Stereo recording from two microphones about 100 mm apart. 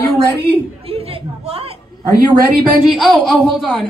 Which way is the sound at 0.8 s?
75° right (ahead or behind).